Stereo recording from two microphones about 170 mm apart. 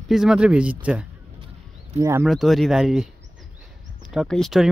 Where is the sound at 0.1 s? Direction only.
5° right (ahead or behind).